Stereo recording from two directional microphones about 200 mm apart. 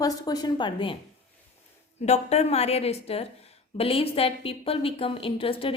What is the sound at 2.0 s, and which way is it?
A woman's voice, 30° left (ahead or behind).